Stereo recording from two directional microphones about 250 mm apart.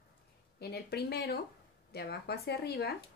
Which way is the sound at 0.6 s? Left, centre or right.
Left.